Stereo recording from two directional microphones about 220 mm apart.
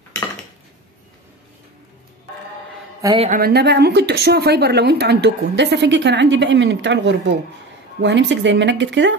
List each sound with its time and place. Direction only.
3.2 s speech: 40° right (ahead or behind); by 9.1 s 55° right (ahead or behind)